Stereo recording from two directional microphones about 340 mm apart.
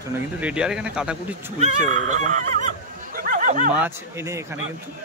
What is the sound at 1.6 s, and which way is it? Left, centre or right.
Speech, right.